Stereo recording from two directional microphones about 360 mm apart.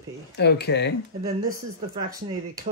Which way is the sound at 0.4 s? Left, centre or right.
Left.